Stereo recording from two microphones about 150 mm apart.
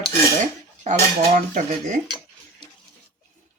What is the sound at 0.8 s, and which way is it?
Dishes, 55° right (ahead or behind).